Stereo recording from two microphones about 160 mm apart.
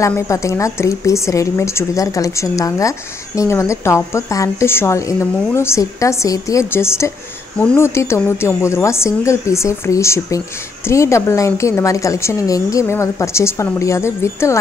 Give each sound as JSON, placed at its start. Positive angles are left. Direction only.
{"t": 0.0, "sound": "a woman's voice", "side_deg": 20}